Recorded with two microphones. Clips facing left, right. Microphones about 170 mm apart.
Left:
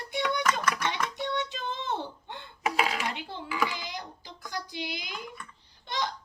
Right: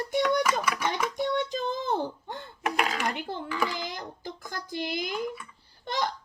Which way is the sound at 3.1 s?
50° right (ahead or behind).